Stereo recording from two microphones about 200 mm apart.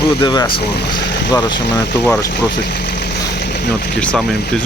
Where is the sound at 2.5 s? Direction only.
55° left (ahead or behind).